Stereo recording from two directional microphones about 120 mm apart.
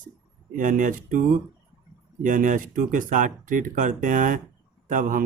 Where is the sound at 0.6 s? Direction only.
90° right.